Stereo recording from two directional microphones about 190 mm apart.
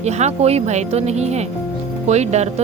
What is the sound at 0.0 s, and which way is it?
Speech, 35° right (ahead or behind).